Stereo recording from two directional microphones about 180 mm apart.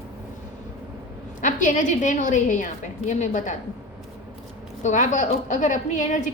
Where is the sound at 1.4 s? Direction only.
45° left (ahead or behind).